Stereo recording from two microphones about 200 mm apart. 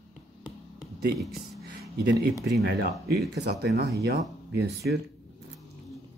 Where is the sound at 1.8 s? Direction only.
50° right (ahead or behind).